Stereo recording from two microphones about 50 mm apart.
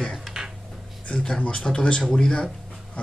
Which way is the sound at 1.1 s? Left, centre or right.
Left.